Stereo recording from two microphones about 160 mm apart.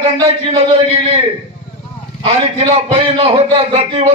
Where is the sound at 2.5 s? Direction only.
40° right (ahead or behind).